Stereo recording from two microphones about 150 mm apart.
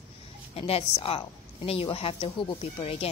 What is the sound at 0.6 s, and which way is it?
A woman's voice, 40° left (ahead or behind).